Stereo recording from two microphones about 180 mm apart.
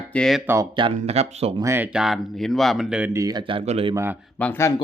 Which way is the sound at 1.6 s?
15° right (ahead or behind).